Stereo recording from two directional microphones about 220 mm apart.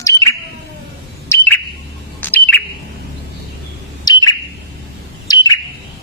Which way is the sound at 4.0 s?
15° left (ahead or behind).